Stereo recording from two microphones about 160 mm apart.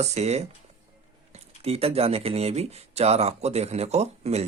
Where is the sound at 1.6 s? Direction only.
40° right (ahead or behind).